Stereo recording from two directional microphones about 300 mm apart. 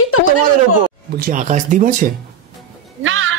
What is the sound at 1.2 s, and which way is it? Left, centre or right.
Speech, right.